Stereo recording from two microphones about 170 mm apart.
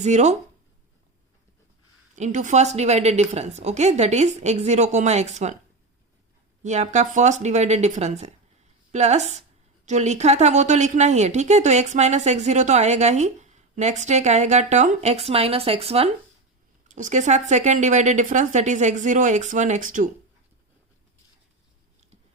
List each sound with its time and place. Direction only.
0.0 s speech: 40° right (ahead or behind)
2.1 s a woman's voice: 45° right (ahead or behind)
6.6 s a woman's voice: 45° right (ahead or behind)